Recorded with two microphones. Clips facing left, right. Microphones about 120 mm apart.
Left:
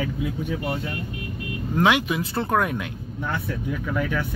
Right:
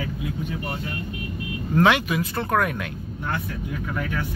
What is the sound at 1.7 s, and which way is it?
Speech, 10° left (ahead or behind).